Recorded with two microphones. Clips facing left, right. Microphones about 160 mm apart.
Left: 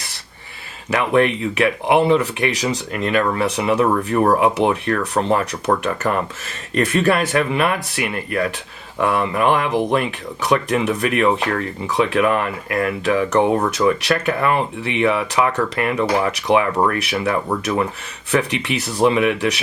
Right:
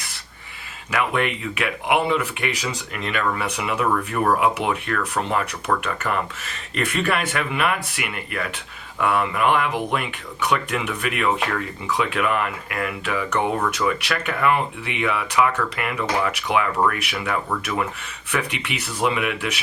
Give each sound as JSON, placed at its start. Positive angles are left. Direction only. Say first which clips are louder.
{"t": 0.9, "sound": "speech", "louder": "left 6 dB", "side_deg": 35}
{"t": 18.9, "sound": "speech", "louder": "left 7 dB", "side_deg": 30}